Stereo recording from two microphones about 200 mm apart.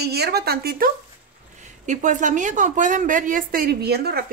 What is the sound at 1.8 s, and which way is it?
A woman's voice, 40° right (ahead or behind).